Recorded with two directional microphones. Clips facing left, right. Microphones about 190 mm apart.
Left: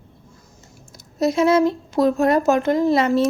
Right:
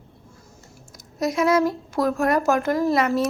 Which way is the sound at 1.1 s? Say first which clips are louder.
Left 3 dB; 25° left (ahead or behind).